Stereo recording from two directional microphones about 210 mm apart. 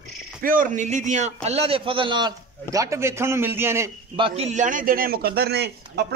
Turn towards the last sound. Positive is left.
turn(degrees=-50)  # may be behind; listen again after turning